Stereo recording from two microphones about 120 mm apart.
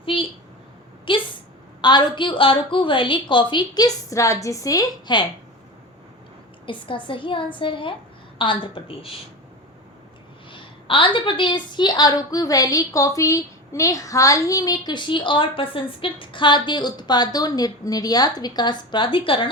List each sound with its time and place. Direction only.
0.0 s a sound: 50° left (ahead or behind)
1.8 s a woman's voice: 40° left (ahead or behind)
6.7 s a woman's voice: 40° left (ahead or behind)
10.5 s a woman's voice: 45° left (ahead or behind)